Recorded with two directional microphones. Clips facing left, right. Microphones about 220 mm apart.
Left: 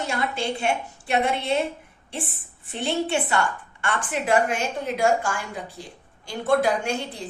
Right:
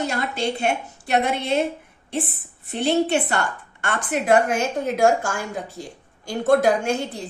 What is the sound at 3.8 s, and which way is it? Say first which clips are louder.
A woman's voice: right 3 dB; 40° right (ahead or behind).